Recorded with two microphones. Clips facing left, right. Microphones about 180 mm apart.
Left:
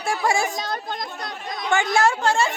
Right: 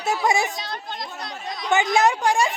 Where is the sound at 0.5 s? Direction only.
45° left (ahead or behind).